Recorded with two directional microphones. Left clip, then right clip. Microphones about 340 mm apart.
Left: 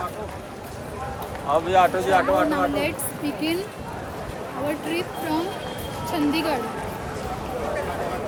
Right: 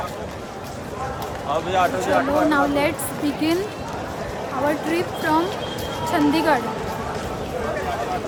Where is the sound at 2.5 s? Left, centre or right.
Centre.